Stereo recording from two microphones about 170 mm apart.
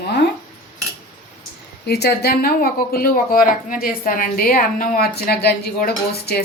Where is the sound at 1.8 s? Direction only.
70° left (ahead or behind).